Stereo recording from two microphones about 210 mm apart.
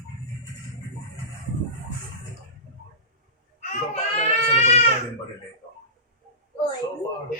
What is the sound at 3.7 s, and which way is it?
Baby cry, 30° left (ahead or behind).